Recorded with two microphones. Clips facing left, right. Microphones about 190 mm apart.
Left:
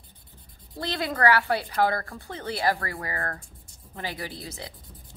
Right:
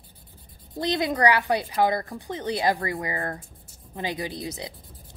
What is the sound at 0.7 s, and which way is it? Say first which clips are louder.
A woman's voice: right 4 dB; 20° right (ahead or behind).